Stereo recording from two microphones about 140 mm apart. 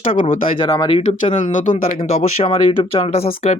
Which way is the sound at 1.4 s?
65° left (ahead or behind).